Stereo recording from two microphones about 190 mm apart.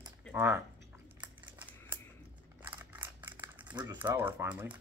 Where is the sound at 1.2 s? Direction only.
10° right (ahead or behind).